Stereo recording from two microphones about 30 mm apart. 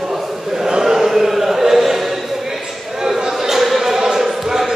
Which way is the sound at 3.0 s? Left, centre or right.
Centre.